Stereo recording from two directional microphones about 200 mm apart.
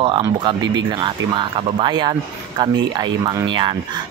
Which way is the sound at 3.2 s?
25° right (ahead or behind).